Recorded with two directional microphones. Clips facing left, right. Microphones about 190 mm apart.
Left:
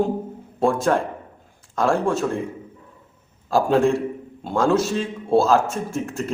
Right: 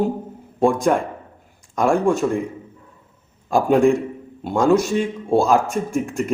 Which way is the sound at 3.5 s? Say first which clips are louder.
Right 2 dB; 15° right (ahead or behind).